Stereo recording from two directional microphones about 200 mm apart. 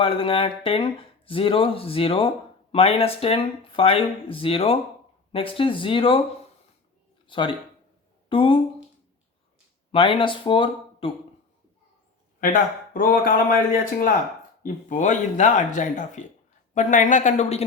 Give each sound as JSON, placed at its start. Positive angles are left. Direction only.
{"t": 0.0, "sound": "speech", "side_deg": 25}
{"t": 7.3, "sound": "speech", "side_deg": 25}
{"t": 9.9, "sound": "speech", "side_deg": 25}
{"t": 12.4, "sound": "speech", "side_deg": 45}
{"t": 14.6, "sound": "speech", "side_deg": 40}